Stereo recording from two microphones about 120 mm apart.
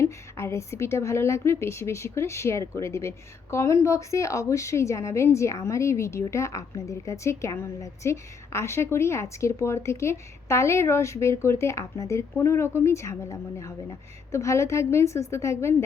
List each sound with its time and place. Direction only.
0.0 s a woman's voice: 20° left (ahead or behind)